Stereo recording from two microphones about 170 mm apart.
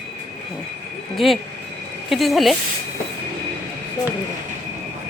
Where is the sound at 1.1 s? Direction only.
Centre (ahead or behind).